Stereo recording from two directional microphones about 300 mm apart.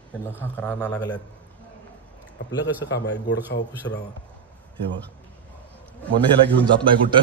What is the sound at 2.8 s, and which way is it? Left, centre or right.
A man's voice, left.